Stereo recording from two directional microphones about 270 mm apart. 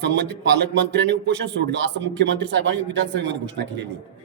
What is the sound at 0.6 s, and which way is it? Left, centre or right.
Speech, right.